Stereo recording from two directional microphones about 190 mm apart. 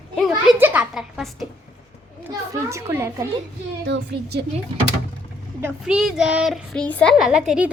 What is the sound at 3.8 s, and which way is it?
Speech, 65° right (ahead or behind).